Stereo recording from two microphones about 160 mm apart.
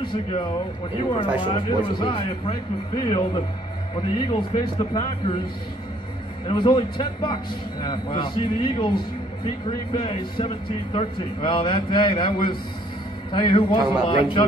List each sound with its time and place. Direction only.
0.0 s a man's voice: 30° left (ahead or behind)
6.4 s a man's voice: 30° left (ahead or behind)